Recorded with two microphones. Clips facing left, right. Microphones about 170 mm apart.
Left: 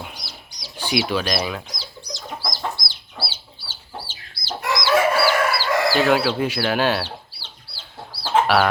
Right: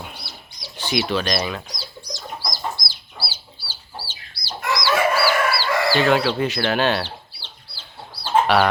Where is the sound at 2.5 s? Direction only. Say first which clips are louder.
Left 1 dB; 25° left (ahead or behind).